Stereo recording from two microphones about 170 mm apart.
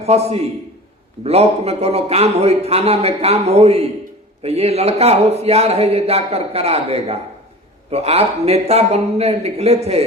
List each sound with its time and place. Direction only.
0.0 s a man's voice: 40° right (ahead or behind)